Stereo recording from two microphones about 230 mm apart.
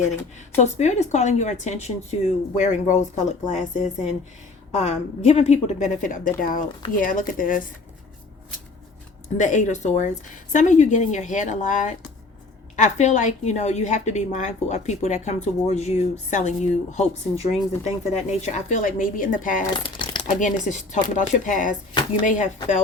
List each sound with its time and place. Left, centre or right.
0.5 s a woman's voice: left
9.4 s a woman's voice: left
19.7 s crumpling: centre
20.4 s a woman's voice: left